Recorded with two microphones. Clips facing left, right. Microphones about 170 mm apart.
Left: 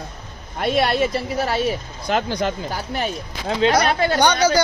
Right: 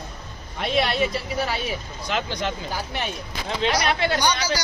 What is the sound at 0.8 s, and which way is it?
Speech, 45° left (ahead or behind).